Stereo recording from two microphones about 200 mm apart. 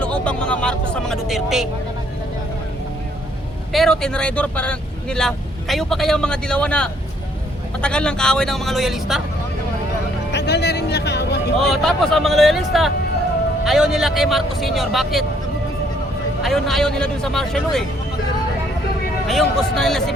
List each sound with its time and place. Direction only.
0.0 s speech: 5° left (ahead or behind)
3.7 s speech: centre (ahead or behind)
10.3 s speech: 60° left (ahead or behind)
11.6 s speech: centre (ahead or behind)
16.4 s speech: centre (ahead or behind)
19.3 s speech: centre (ahead or behind)